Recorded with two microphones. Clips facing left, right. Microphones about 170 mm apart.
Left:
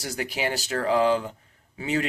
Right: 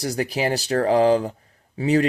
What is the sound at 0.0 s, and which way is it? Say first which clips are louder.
Speech: right 6 dB; 35° right (ahead or behind).